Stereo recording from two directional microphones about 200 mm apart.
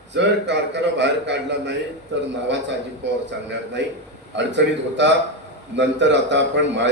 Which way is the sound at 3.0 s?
60° right (ahead or behind).